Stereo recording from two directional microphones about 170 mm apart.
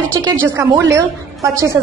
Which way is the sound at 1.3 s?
20° right (ahead or behind).